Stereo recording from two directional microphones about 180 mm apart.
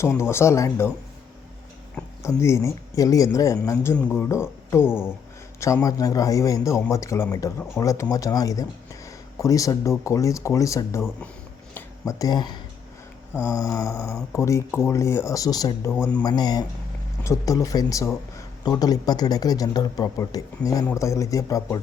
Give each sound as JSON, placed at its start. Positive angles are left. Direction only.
{"t": 0.0, "sound": "a man's voice", "side_deg": 15}
{"t": 2.4, "sound": "a man's voice", "side_deg": 15}
{"t": 4.8, "sound": "speech", "side_deg": -5}
{"t": 5.5, "sound": "a man's voice", "side_deg": 15}
{"t": 11.7, "sound": "a sound", "side_deg": 20}
{"t": 13.5, "sound": "a man's voice", "side_deg": 20}